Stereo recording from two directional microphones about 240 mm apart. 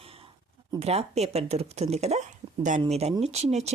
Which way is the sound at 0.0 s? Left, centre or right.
Right.